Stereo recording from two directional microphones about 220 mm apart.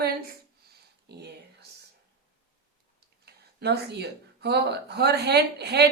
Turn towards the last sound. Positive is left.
turn(degrees=-50)  # may be behind; listen again after turning